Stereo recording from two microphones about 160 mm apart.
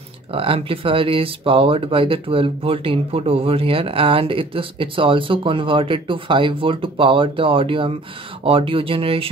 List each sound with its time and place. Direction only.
0.3 s speech: 35° right (ahead or behind)